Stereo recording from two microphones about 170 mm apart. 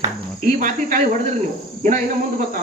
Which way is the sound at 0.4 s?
50° right (ahead or behind).